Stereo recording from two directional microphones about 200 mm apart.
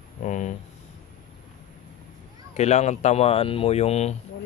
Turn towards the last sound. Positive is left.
turn(degrees=35)  # may be behind; listen again after turning